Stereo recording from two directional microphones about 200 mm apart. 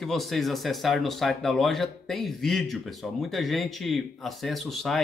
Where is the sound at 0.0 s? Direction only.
Centre (ahead or behind).